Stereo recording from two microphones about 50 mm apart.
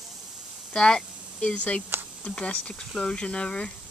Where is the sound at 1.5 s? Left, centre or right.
Left.